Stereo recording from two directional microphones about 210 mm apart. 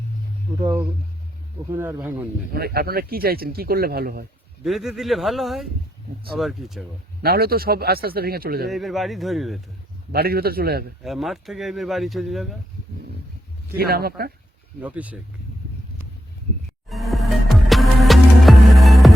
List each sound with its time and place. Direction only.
0.6 s speech: 15° right (ahead or behind)
2.5 s speech: 45° right (ahead or behind)
4.6 s speech: centre (ahead or behind)
7.2 s speech: 45° right (ahead or behind)
8.7 s speech: centre (ahead or behind)
10.1 s speech: 45° right (ahead or behind)
11.0 s speech: centre (ahead or behind)
13.7 s speech: 45° right (ahead or behind)
14.8 s speech: 5° right (ahead or behind)
16.9 s music: centre (ahead or behind)